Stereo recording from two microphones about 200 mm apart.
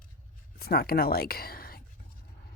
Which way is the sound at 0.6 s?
50° left (ahead or behind).